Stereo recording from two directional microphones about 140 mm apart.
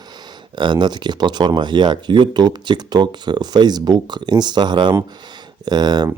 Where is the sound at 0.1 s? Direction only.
30° right (ahead or behind).